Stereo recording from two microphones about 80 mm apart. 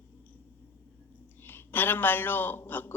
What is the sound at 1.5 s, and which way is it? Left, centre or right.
Speech, left.